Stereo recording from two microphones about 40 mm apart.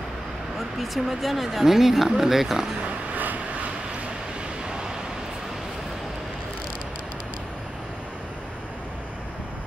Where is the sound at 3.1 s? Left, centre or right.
Right.